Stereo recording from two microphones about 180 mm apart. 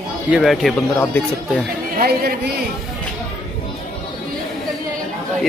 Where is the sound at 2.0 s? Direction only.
60° right (ahead or behind).